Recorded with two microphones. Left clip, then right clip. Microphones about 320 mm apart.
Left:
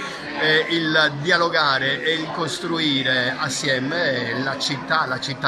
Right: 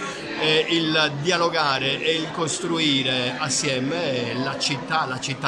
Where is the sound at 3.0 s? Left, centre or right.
Centre.